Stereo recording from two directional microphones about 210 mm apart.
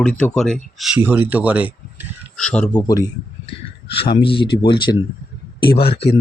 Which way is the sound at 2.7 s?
15° left (ahead or behind).